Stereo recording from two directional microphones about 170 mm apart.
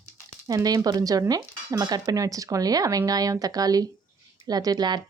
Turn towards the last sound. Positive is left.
turn(degrees=-25)  # may be behind; listen again after turning